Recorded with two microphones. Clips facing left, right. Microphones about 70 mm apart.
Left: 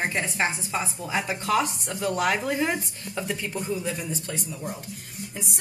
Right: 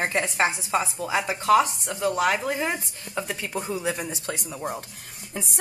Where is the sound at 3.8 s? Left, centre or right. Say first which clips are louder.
Right 3 dB; right.